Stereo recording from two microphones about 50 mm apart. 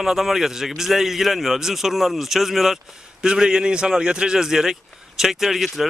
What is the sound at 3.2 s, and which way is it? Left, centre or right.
Speech, centre.